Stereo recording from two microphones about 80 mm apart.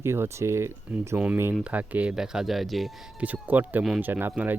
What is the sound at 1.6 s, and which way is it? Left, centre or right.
Speech, centre.